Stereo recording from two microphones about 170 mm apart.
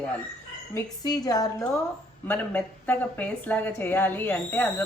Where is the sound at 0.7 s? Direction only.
20° left (ahead or behind).